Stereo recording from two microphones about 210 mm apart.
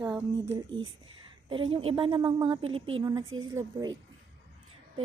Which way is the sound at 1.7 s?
25° right (ahead or behind).